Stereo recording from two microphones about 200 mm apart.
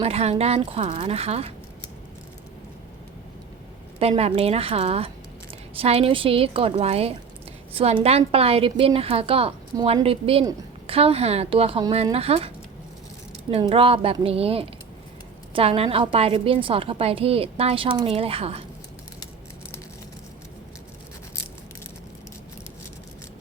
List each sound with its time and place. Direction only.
0.0 s speech: 30° right (ahead or behind)
4.0 s a woman's voice: 30° right (ahead or behind)
13.5 s a woman's voice: 25° right (ahead or behind)